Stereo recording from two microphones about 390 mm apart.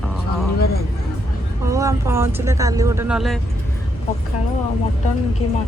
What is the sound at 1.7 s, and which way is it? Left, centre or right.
Speech, centre.